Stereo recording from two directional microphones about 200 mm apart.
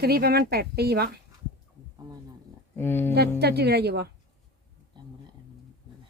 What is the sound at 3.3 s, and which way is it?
Speech, 55° right (ahead or behind).